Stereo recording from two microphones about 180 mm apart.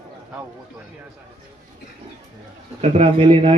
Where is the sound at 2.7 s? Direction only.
35° right (ahead or behind).